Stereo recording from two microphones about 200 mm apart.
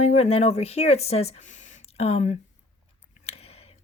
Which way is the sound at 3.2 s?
30° left (ahead or behind).